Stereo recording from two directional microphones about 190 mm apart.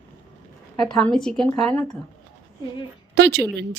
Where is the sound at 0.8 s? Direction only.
Centre (ahead or behind).